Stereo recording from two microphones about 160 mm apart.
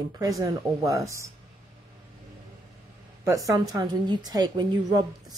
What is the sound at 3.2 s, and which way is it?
Speech, 20° right (ahead or behind).